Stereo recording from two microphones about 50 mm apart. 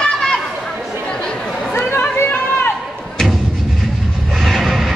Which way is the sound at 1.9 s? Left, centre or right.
Left.